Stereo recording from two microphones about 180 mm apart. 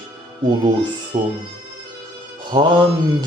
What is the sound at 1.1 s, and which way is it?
Speech, 30° right (ahead or behind).